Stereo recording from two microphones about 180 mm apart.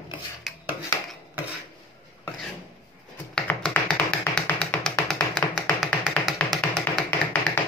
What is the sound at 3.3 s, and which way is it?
Tap, 5° left (ahead or behind).